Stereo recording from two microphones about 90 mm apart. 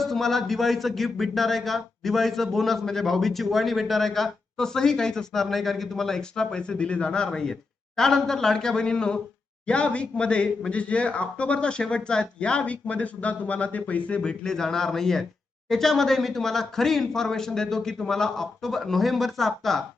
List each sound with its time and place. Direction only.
0.0 s speech: 5° left (ahead or behind)